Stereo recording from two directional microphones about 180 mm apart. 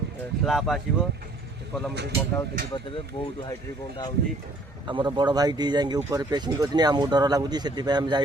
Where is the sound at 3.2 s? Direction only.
25° left (ahead or behind).